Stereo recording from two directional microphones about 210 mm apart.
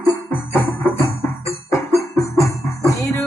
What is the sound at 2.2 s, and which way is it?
Music, 15° left (ahead or behind).